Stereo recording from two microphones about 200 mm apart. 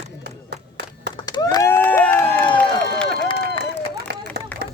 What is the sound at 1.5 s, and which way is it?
Crowd, 10° left (ahead or behind).